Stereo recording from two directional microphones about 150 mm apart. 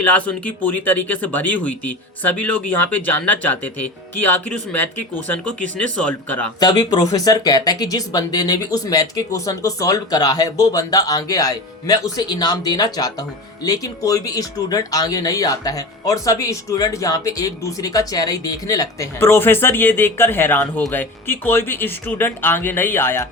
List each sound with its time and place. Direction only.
0.0 s speech: 10° left (ahead or behind)
6.6 s speech: 25° left (ahead or behind)